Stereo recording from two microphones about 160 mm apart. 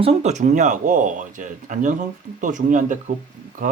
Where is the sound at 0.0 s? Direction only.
40° right (ahead or behind).